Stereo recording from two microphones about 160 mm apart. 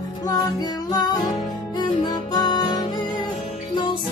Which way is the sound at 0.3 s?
25° left (ahead or behind).